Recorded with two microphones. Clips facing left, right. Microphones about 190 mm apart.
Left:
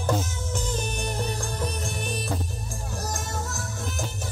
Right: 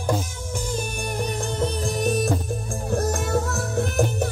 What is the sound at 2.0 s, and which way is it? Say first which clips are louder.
Music: right 12 dB; 45° right (ahead or behind).